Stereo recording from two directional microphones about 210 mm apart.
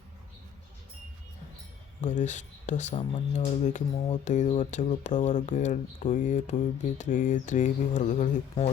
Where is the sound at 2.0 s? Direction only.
35° left (ahead or behind).